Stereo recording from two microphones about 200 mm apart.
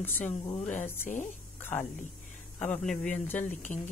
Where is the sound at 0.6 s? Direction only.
35° left (ahead or behind).